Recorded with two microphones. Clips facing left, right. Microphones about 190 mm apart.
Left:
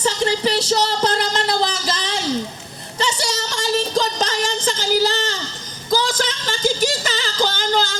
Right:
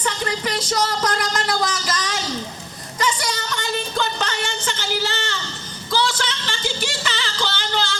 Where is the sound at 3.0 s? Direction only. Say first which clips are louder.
Left 1 dB; 30° left (ahead or behind).